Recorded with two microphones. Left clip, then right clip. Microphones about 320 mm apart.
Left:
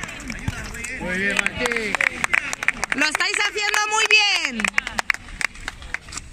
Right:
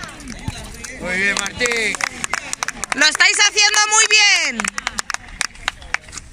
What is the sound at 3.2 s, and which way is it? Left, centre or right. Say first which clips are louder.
Speech: right 8 dB; centre.